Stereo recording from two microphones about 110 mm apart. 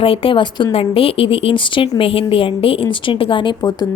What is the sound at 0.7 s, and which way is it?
A woman's voice, 60° left (ahead or behind).